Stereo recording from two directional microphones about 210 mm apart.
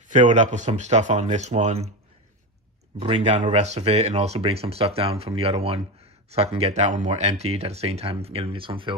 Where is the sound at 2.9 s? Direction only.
30° right (ahead or behind).